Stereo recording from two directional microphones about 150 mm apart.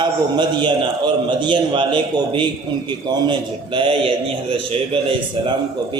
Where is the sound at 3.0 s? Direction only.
30° right (ahead or behind).